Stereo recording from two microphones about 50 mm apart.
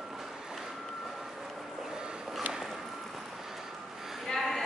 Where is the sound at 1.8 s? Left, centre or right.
Centre.